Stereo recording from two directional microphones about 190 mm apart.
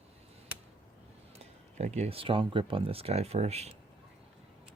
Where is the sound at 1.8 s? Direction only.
35° right (ahead or behind).